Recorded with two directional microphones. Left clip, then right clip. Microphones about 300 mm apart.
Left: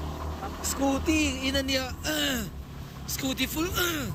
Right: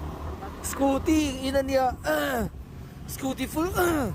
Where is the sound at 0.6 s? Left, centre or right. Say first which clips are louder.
Right 3 dB; right.